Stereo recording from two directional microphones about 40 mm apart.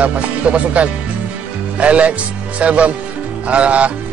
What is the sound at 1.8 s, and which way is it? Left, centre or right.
Speech, right.